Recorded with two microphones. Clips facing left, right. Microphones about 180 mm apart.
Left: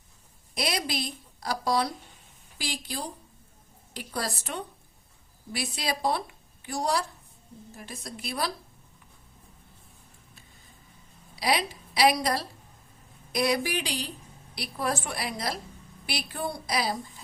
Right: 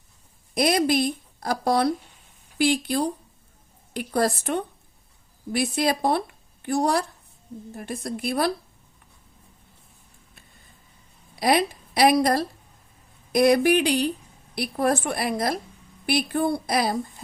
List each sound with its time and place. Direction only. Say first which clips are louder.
0.5 s a woman's voice: right 10 dB; 50° right (ahead or behind)
11.3 s a woman's voice: right 6 dB; 50° right (ahead or behind)